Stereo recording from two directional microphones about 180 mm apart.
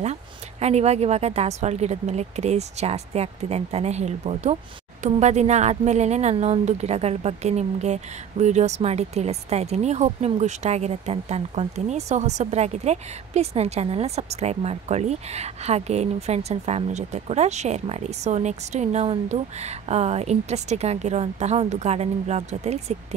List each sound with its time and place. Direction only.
0.0 s a woman's voice: 35° right (ahead or behind)